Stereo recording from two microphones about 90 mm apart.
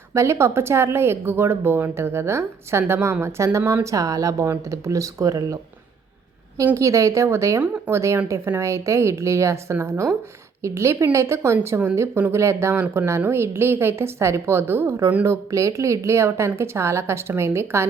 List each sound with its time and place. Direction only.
0.1 s a woman's voice: 35° right (ahead or behind)
6.7 s a woman's voice: 35° right (ahead or behind)